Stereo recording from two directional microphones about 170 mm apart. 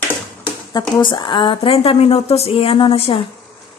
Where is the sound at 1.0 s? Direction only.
30° left (ahead or behind).